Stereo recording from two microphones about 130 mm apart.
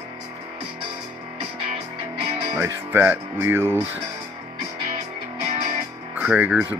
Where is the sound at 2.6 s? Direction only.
15° right (ahead or behind).